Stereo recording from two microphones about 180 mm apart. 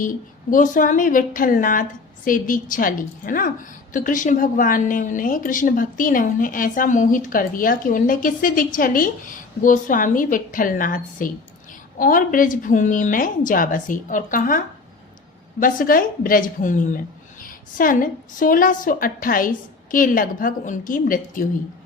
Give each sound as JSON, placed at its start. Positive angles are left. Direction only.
{"t": 0.0, "sound": "speech", "side_deg": 50}
{"t": 15.6, "sound": "speech", "side_deg": 50}